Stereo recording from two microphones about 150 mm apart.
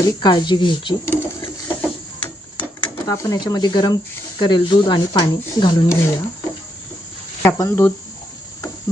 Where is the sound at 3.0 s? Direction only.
25° left (ahead or behind).